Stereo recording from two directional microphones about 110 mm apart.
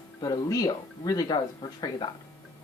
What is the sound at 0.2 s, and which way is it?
Speech, 35° left (ahead or behind).